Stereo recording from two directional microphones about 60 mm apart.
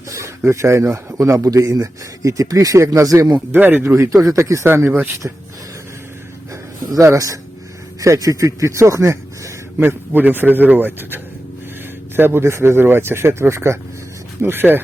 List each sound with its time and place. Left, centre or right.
0.1 s speech: right
0.9 s speech: right
3.5 s a man's voice: right
4.2 s speech: right
4.6 s a man's voice: right
7.0 s speech: right
9.7 s a man's voice: right
14.4 s a man's voice: right